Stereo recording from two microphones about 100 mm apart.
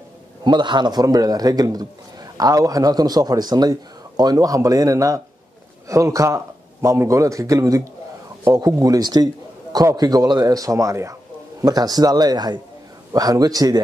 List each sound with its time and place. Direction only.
0.4 s a man's voice: 50° right (ahead or behind)